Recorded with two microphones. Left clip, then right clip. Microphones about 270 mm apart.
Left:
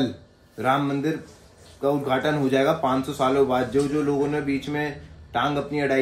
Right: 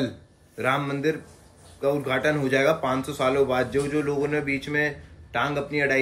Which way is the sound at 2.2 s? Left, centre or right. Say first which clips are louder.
Right 1 dB; centre.